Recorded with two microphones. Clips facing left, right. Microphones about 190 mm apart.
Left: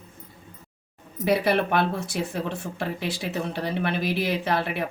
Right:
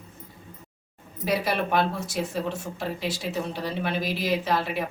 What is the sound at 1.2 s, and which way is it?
Speech, 60° left (ahead or behind).